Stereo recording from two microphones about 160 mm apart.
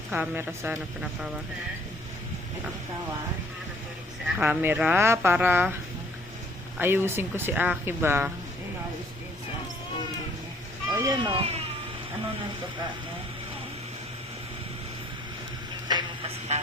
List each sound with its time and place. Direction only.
0.1 s speech: 10° right (ahead or behind)
4.4 s speech: 10° right (ahead or behind)
6.7 s speech: 15° right (ahead or behind)
11.0 s speech: 25° right (ahead or behind)
15.9 s a sound: 25° right (ahead or behind)
16.5 s speech: 45° right (ahead or behind)